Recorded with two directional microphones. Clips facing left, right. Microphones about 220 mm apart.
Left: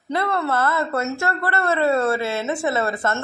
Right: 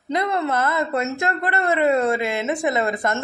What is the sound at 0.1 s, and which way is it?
A woman's voice, 15° right (ahead or behind).